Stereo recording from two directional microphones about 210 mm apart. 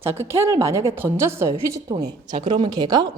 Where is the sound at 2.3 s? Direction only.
30° right (ahead or behind).